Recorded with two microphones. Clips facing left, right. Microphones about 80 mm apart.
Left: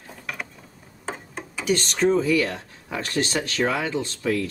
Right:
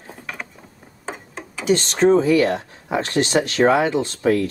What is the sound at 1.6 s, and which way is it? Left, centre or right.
Speech, right.